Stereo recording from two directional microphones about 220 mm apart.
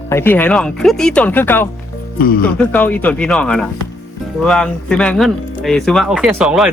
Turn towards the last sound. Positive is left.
turn(degrees=-5)  # may be behind; listen again after turning